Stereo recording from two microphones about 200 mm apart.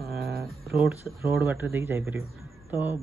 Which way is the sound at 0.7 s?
10° right (ahead or behind).